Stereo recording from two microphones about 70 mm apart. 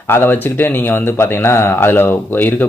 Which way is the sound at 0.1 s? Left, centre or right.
Left.